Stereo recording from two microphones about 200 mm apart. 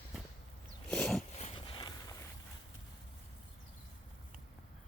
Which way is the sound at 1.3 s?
30° left (ahead or behind).